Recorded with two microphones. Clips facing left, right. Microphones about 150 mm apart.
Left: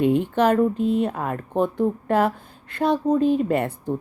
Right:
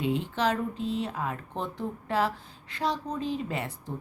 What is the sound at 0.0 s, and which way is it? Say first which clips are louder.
Speech: left 9 dB; 55° left (ahead or behind).